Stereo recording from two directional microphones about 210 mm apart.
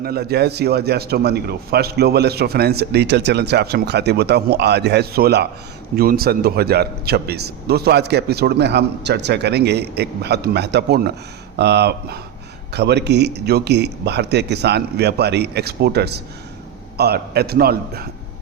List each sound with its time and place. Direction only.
0.0 s a man's voice: 45° right (ahead or behind)